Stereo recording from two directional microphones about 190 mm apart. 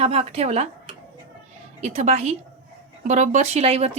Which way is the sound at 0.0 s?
35° right (ahead or behind).